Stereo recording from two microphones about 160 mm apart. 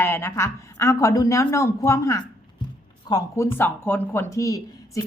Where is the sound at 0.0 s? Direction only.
15° left (ahead or behind).